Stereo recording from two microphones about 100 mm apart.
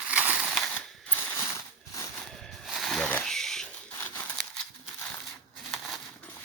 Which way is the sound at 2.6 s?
Centre (ahead or behind).